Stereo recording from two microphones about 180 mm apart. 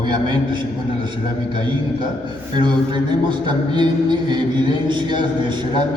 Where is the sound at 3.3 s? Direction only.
25° right (ahead or behind).